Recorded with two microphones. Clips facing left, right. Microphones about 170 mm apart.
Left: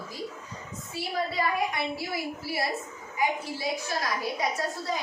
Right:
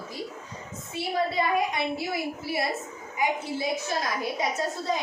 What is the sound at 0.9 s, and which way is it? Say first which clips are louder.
A woman's voice: right 3 dB; 20° right (ahead or behind).